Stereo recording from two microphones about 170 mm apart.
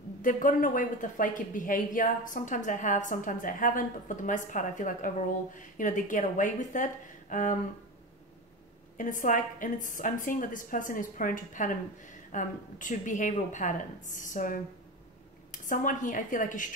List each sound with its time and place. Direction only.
0.2 s a woman's voice: 50° left (ahead or behind)
8.9 s a woman's voice: 50° left (ahead or behind)